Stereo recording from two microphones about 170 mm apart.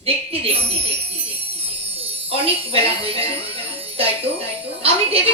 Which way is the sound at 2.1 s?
35° right (ahead or behind).